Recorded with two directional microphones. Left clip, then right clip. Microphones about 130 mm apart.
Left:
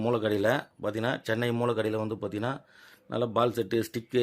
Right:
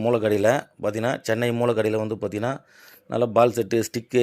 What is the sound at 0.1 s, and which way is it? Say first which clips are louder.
Speech: right 7 dB; 30° right (ahead or behind).